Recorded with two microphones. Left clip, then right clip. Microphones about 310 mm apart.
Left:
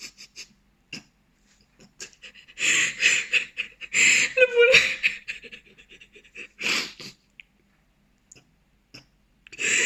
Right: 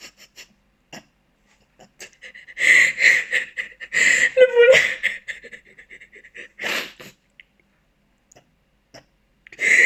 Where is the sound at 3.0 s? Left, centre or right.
Centre.